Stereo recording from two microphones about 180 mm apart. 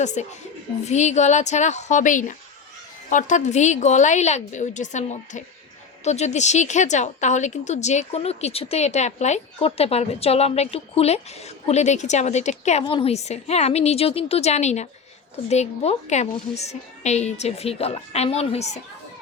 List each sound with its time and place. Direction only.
0.0 s a woman's voice: 40° left (ahead or behind)
12.8 s a woman's voice: 30° left (ahead or behind)